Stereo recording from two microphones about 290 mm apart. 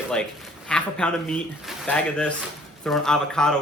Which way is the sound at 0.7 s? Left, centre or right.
Centre.